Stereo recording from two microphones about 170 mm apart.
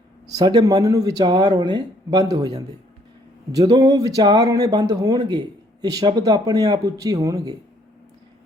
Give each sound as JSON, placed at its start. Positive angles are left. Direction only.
{"t": 0.3, "sound": "speech", "side_deg": -20}